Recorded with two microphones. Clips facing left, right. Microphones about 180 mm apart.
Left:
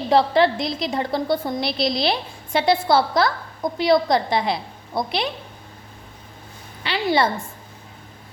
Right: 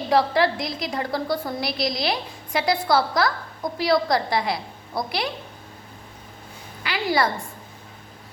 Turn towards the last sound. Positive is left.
turn(degrees=25)  # may be behind; listen again after turning